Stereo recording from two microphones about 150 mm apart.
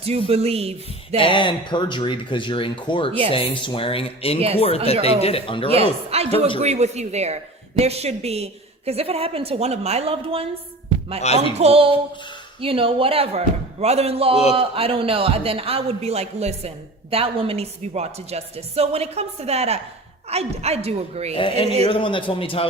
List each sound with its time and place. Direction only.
0.0 s a man's voice: 40° right (ahead or behind)
1.2 s speech: 30° left (ahead or behind)
3.1 s a man's voice: 35° right (ahead or behind)
3.3 s speech: 35° left (ahead or behind)
5.6 s a man's voice: 40° right (ahead or behind)
11.5 s a man's voice: 40° right (ahead or behind)
21.3 s speech: 35° left (ahead or behind)